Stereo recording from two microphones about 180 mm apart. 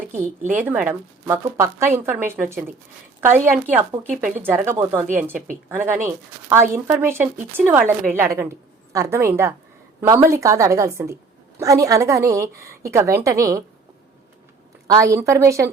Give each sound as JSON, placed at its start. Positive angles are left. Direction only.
{"t": 0.5, "sound": "a woman's voice", "side_deg": -10}
{"t": 14.8, "sound": "a woman's voice", "side_deg": -20}